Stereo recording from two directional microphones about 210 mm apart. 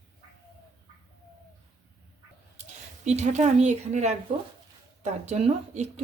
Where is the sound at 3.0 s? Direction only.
35° right (ahead or behind).